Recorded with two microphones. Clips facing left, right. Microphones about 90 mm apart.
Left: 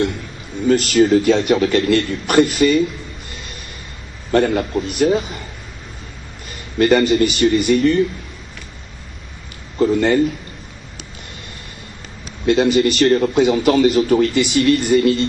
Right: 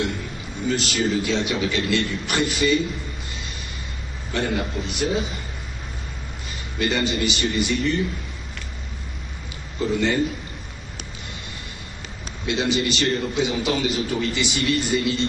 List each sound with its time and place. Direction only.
0.7 s a man's voice: 45° left (ahead or behind)
4.3 s a man's voice: 45° left (ahead or behind)
6.8 s a man's voice: 45° left (ahead or behind)
9.8 s a man's voice: 45° left (ahead or behind)
12.4 s a man's voice: 45° left (ahead or behind)